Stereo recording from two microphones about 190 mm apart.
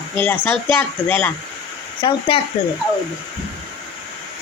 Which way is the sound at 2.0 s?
25° left (ahead or behind).